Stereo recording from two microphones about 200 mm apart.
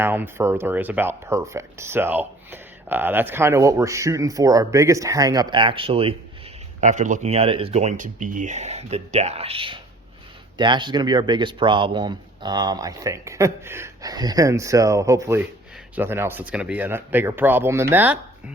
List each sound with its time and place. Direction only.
0.0 s speech: 10° right (ahead or behind)